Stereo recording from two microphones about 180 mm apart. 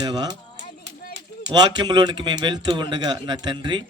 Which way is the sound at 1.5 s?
25° right (ahead or behind).